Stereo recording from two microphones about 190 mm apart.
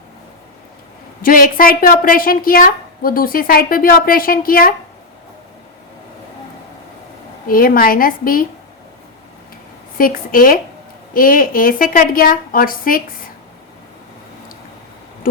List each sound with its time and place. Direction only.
1.2 s a woman's voice: 45° left (ahead or behind)
7.4 s a woman's voice: 50° left (ahead or behind)
10.0 s a woman's voice: 45° left (ahead or behind)